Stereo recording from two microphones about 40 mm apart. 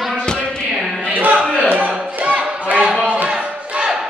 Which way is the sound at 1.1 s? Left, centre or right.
Right.